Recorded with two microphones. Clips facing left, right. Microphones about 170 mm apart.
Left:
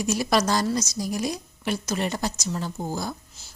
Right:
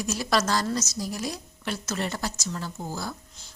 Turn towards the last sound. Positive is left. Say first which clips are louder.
# even
turn(degrees=5)  # may be behind; listen again after turning